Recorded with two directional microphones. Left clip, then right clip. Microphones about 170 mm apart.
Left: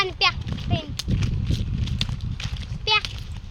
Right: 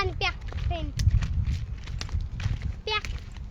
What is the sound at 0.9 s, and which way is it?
Horse, 10° right (ahead or behind).